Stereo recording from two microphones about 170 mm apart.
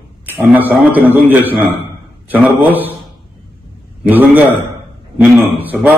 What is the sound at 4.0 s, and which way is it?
Speech, 10° right (ahead or behind).